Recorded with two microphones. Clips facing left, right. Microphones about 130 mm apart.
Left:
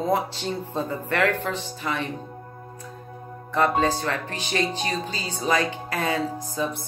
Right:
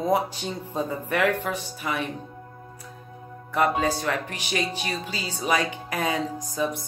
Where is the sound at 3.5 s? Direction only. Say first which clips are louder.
Left 1 dB; 10° right (ahead or behind).